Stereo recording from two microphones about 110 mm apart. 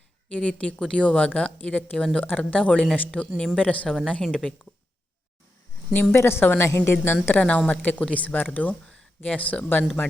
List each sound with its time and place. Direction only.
0.3 s speech: 10° left (ahead or behind)
5.9 s a woman's voice: 20° left (ahead or behind)